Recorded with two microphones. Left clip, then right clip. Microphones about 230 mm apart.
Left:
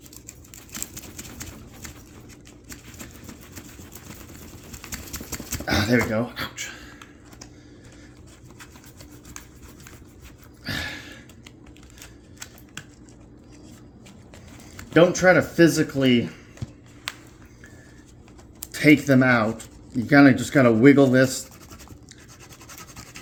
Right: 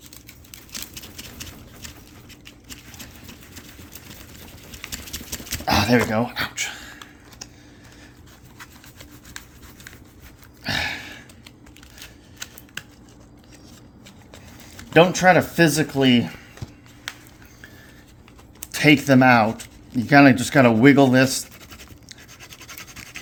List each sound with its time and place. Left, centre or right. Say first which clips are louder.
0.7 s typewriter: right 2 dB; centre
4.8 s clip-clop: right 3 dB; centre
5.7 s a sound: right 3 dB; right
10.7 s a sound: right 6 dB; right
14.9 s speech: right 2 dB; right
18.7 s speech: right 1 dB; right
22.4 s scratch: right 4 dB; centre